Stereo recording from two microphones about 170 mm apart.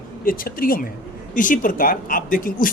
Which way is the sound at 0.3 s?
55° left (ahead or behind).